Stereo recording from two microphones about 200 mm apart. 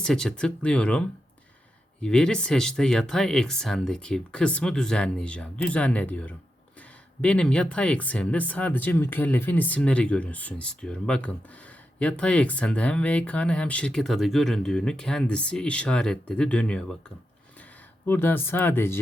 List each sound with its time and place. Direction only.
0.0 s speech: 5° left (ahead or behind)
18.0 s speech: 10° left (ahead or behind)